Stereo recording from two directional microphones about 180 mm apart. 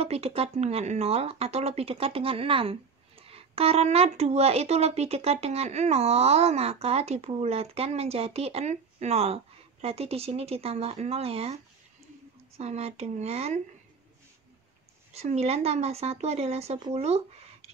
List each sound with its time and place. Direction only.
0.0 s speech: 35° right (ahead or behind)
15.1 s speech: 35° right (ahead or behind)